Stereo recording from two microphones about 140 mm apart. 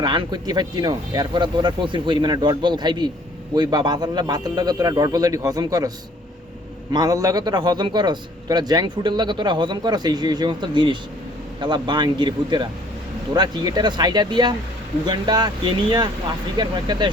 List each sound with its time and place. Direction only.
0.0 s a man's voice: 30° right (ahead or behind)
6.9 s a man's voice: 25° right (ahead or behind)